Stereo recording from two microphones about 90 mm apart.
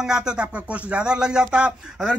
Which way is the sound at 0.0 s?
10° right (ahead or behind).